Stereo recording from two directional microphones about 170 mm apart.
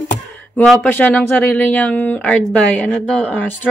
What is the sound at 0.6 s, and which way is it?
Speech, 10° left (ahead or behind).